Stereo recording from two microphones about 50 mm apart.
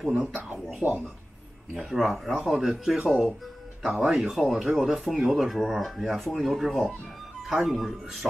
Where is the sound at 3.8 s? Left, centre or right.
Centre.